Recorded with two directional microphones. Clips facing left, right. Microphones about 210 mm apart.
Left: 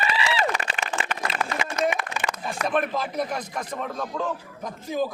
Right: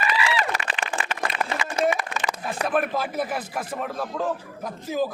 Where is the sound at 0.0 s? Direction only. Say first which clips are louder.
Even; 30° left (ahead or behind).